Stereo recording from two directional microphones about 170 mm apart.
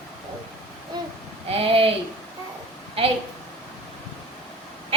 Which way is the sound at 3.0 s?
35° right (ahead or behind).